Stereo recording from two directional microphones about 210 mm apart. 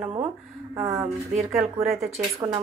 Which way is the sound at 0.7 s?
10° right (ahead or behind).